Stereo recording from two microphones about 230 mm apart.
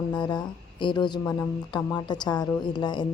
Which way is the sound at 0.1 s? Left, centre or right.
Centre.